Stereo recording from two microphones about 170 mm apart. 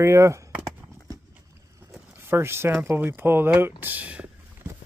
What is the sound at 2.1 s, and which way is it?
Speech, 15° right (ahead or behind).